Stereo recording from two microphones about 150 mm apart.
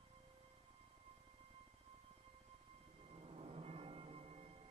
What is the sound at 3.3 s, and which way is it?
Music, 40° right (ahead or behind).